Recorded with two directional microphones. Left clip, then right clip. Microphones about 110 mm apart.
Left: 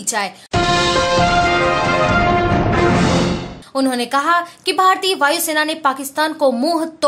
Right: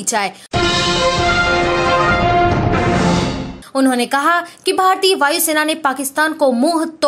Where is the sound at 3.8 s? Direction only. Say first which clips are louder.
Right 2 dB; 25° right (ahead or behind).